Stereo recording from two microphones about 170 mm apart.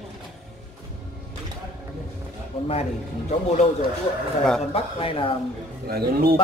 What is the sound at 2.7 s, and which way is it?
Speech, 40° left (ahead or behind).